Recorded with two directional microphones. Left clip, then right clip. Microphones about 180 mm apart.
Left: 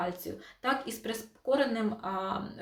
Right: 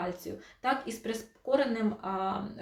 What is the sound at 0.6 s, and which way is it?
Speech, 10° left (ahead or behind).